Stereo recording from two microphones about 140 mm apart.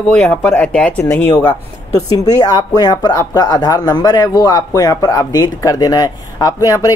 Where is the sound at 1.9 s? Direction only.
25° left (ahead or behind).